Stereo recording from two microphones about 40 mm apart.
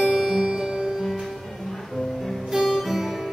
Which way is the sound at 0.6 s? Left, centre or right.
Centre.